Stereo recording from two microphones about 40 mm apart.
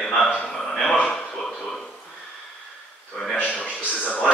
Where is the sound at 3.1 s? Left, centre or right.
Centre.